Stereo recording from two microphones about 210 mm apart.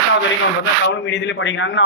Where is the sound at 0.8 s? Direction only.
55° left (ahead or behind).